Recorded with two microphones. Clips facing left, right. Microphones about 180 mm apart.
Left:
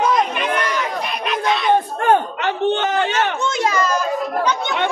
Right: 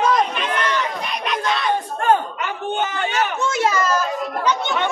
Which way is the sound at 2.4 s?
70° left (ahead or behind).